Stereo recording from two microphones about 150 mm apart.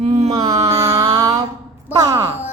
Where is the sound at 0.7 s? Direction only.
20° right (ahead or behind).